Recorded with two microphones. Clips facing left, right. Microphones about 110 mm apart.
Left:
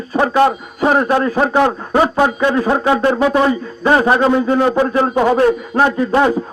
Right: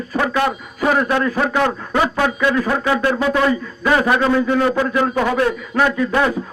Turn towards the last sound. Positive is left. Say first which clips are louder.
# left 3 dB
turn(degrees=30)  # may be behind; listen again after turning